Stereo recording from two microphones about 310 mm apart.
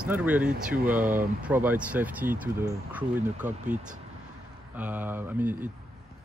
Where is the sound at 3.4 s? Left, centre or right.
Right.